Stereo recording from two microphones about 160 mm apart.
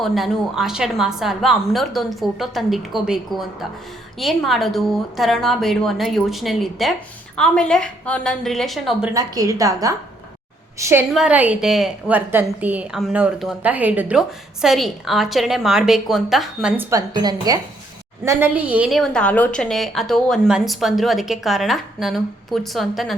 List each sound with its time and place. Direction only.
0.0 s a woman's voice: centre (ahead or behind)
9.1 s a woman's voice: 20° right (ahead or behind)
11.1 s a woman's voice: 5° right (ahead or behind)
16.7 s a woman's voice: 10° right (ahead or behind)
17.2 s a woman's voice: 25° right (ahead or behind); by 23.1 s centre (ahead or behind)